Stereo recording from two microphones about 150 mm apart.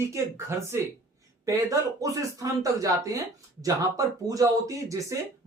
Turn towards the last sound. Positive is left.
turn(degrees=-20)  # may be behind; listen again after turning